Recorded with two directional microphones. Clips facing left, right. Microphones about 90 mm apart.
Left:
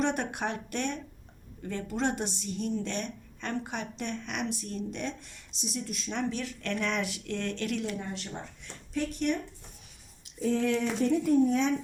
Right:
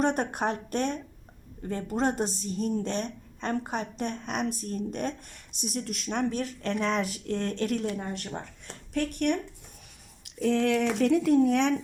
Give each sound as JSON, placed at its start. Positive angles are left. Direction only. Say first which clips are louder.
{"t": 0.0, "sound": "a woman's voice", "louder": "right 3 dB", "side_deg": -40}
{"t": 10.2, "sound": "speech", "louder": "right 3 dB", "side_deg": -70}